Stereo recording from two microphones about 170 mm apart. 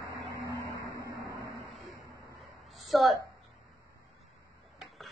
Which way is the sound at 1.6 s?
Centre (ahead or behind).